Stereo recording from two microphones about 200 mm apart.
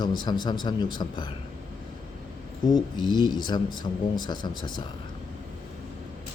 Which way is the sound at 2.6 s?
20° left (ahead or behind).